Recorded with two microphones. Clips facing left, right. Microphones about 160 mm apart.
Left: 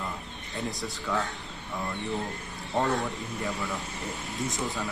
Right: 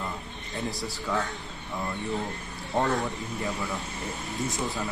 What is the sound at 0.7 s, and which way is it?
Speech, 20° left (ahead or behind).